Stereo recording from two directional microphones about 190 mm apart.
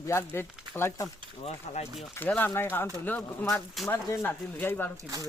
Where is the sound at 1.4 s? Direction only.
35° left (ahead or behind).